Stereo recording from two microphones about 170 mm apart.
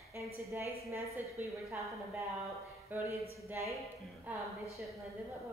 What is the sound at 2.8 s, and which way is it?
Speech, 10° right (ahead or behind).